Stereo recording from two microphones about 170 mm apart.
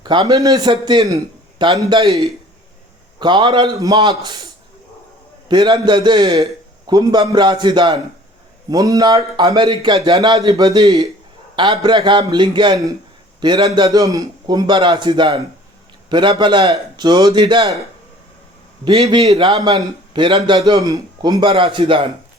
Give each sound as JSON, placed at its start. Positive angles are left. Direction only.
{"t": 0.0, "sound": "a man's voice", "side_deg": -25}
{"t": 3.2, "sound": "a man's voice", "side_deg": -25}
{"t": 5.5, "sound": "a man's voice", "side_deg": -25}
{"t": 18.9, "sound": "a man's voice", "side_deg": -35}